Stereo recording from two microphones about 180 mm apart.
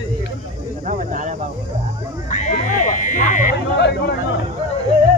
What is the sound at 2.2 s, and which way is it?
Frog, 40° left (ahead or behind).